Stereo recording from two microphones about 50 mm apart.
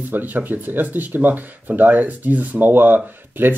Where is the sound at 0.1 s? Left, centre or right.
Right.